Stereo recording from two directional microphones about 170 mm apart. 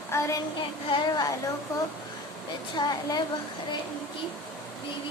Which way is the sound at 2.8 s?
25° left (ahead or behind).